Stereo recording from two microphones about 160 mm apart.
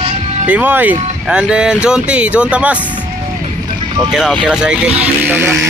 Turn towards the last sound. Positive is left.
turn(degrees=-10)  # may be behind; listen again after turning